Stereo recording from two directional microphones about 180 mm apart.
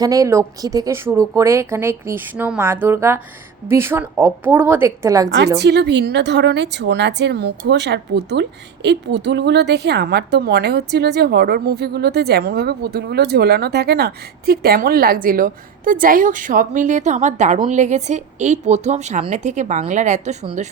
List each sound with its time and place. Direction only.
0.0 s speech: 20° right (ahead or behind)
5.5 s a woman's voice: 70° right (ahead or behind); by 20.3 s 40° right (ahead or behind)